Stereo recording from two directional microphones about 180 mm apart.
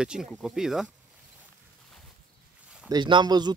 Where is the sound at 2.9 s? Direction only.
25° right (ahead or behind).